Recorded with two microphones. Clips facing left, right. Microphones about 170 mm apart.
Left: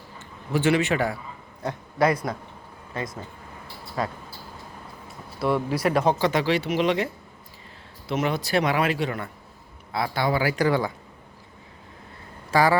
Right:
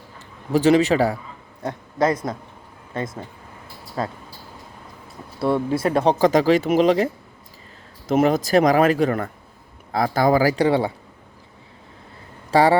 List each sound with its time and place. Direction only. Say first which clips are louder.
0.5 s speech: right 6 dB; 40° right (ahead or behind)
1.6 s speech: right 2 dB; 20° right (ahead or behind)
4.0 s speech: right 2 dB; 30° right (ahead or behind)
5.4 s speech: right 3 dB; 25° right (ahead or behind)
6.1 s speech: right 7 dB; 40° right (ahead or behind)
12.5 s speech: right 4 dB; 30° right (ahead or behind)